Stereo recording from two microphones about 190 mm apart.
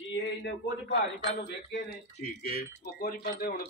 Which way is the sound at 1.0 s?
60° left (ahead or behind).